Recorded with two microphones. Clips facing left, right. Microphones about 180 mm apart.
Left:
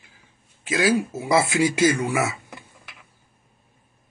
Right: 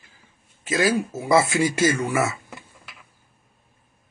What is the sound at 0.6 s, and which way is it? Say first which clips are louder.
Speech: left 1 dB; centre (ahead or behind).